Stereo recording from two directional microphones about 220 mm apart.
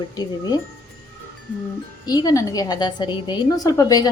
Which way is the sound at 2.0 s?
15° left (ahead or behind).